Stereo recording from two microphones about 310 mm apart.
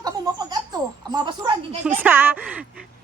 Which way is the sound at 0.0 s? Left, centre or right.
Centre.